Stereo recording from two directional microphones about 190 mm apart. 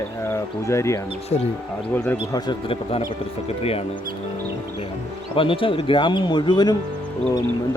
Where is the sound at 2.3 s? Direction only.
25° left (ahead or behind).